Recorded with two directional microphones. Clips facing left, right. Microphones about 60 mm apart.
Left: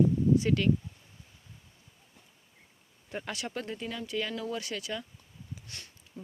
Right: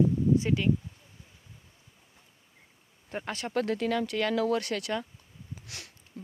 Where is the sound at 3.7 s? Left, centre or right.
Right.